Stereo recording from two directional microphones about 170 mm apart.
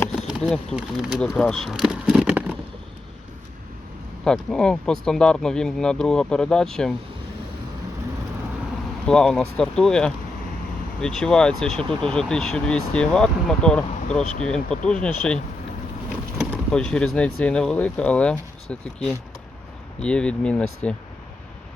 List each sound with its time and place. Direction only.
0.2 s a sound: 5° right (ahead or behind)
0.8 s speech: centre (ahead or behind)
4.2 s speech: 5° left (ahead or behind)
9.0 s speech: 5° left (ahead or behind)
16.4 s speech: 5° left (ahead or behind)